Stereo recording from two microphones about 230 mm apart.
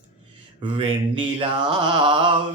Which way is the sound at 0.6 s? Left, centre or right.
Right.